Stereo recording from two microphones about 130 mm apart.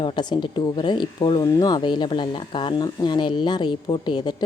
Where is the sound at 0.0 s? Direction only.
35° left (ahead or behind).